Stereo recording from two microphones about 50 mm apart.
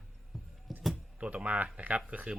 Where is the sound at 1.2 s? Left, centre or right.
Right.